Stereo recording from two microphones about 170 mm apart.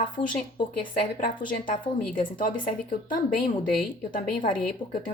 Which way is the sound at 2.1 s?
55° left (ahead or behind).